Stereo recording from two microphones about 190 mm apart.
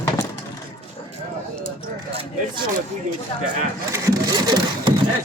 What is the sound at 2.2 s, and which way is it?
Speech, 25° right (ahead or behind).